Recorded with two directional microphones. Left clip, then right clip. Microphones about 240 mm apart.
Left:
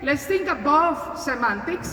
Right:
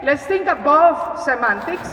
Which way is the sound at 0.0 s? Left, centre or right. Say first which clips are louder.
Right 5 dB; left.